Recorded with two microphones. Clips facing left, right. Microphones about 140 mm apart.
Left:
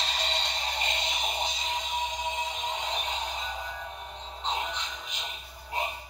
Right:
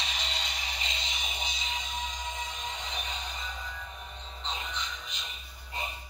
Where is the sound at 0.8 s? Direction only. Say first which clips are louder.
Left 7 dB; 60° left (ahead or behind).